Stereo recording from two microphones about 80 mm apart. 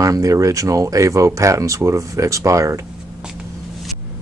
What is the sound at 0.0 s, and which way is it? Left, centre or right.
Speech, right.